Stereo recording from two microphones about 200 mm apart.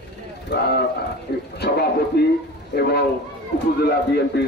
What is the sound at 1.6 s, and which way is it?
A man's voice, 55° left (ahead or behind).